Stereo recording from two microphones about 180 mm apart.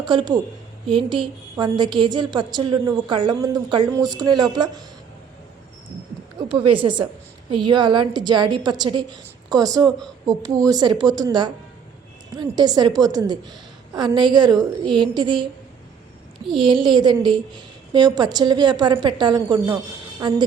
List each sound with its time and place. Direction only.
0.0 s a woman's voice: 25° right (ahead or behind)
6.6 s a woman's voice: 25° right (ahead or behind)
16.6 s a woman's voice: 25° right (ahead or behind)